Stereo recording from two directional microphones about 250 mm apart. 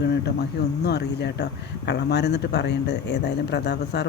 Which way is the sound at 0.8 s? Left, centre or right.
Left.